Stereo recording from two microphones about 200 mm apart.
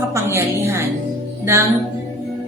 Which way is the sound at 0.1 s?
10° right (ahead or behind).